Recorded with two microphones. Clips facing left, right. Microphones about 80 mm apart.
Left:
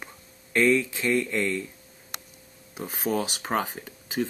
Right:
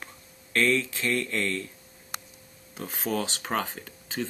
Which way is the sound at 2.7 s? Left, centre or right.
Centre.